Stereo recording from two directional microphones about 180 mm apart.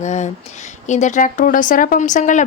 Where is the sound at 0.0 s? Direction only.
40° left (ahead or behind).